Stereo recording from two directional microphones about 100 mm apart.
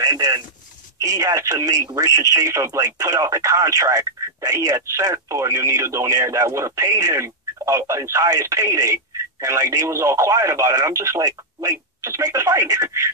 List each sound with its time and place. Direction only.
0.0 s speech: 35° right (ahead or behind)